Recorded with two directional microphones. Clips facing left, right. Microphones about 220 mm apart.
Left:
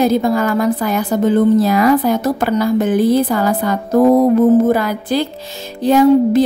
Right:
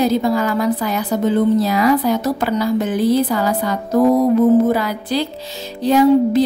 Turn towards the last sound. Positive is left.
turn(degrees=50)  # may be behind; listen again after turning